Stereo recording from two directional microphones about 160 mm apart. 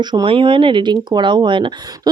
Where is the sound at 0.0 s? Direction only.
25° right (ahead or behind).